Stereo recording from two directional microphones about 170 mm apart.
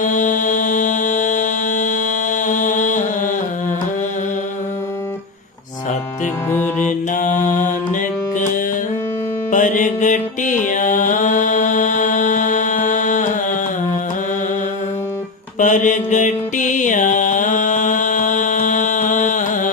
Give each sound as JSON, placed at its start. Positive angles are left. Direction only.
{"t": 0.0, "sound": "music", "side_deg": 50}
{"t": 6.7, "sound": "mantra", "side_deg": 50}
{"t": 9.5, "sound": "music", "side_deg": 50}
{"t": 15.5, "sound": "music", "side_deg": 50}